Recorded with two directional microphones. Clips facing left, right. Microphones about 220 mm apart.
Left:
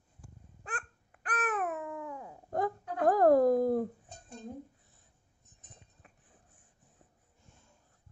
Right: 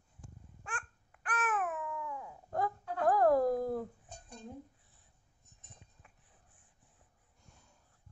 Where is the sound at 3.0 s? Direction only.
40° left (ahead or behind).